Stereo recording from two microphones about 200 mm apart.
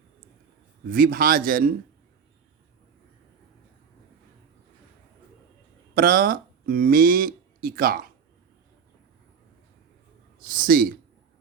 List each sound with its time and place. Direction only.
0.9 s a man's voice: 45° right (ahead or behind)
5.9 s speech: 45° right (ahead or behind)
10.4 s a man's voice: 45° right (ahead or behind)